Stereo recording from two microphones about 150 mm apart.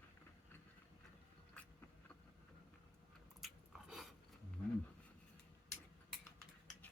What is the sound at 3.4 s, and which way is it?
Biting, centre (ahead or behind).